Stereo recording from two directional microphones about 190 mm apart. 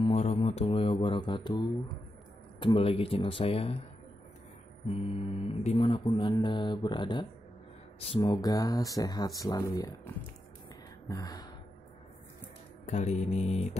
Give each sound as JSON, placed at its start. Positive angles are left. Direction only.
{"t": 0.0, "sound": "music", "side_deg": 30}
{"t": 2.6, "sound": "mantra", "side_deg": 30}
{"t": 4.8, "sound": "mantra", "side_deg": 30}
{"t": 11.1, "sound": "mantra", "side_deg": 20}
{"t": 12.8, "sound": "mantra", "side_deg": 40}